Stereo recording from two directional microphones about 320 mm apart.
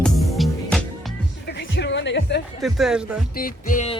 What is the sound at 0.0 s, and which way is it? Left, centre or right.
Music, centre.